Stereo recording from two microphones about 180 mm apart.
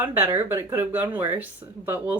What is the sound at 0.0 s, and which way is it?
Speech, 10° right (ahead or behind).